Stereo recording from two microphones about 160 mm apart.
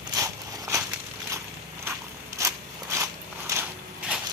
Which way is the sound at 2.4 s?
20° right (ahead or behind).